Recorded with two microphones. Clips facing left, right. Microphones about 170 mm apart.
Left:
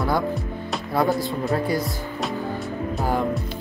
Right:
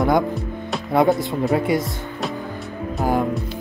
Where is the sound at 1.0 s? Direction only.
Centre (ahead or behind).